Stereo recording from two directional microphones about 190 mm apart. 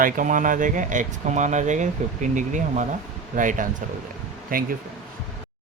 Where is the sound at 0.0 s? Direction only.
45° right (ahead or behind).